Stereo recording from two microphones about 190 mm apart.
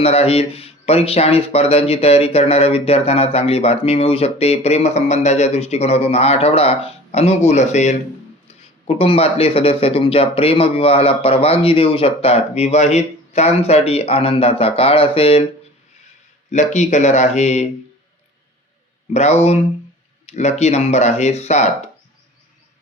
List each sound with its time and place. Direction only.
0.0 s speech: 30° left (ahead or behind)
16.7 s speech: 40° left (ahead or behind)
19.1 s speech: 35° left (ahead or behind)